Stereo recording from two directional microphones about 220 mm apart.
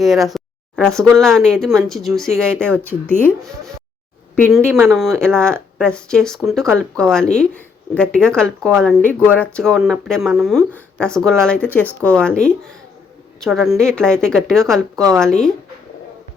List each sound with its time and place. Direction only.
0.0 s speech: centre (ahead or behind)